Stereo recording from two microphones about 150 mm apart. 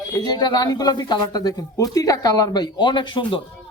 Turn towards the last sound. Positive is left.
turn(degrees=30)  # may be behind; listen again after turning